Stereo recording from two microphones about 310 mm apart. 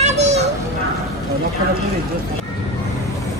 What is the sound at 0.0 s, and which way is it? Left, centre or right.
Children playing, right.